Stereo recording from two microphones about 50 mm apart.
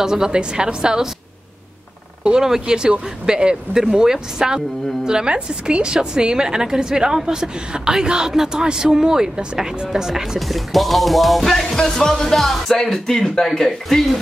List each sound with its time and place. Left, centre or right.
0.0 s speech: centre
2.2 s speech: centre